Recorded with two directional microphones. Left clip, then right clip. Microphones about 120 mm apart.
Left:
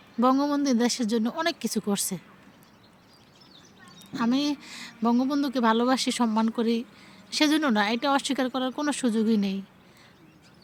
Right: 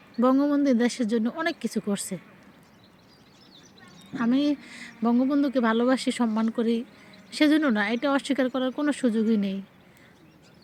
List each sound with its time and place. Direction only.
0.2 s speech: 35° left (ahead or behind)
4.1 s speech: 40° left (ahead or behind)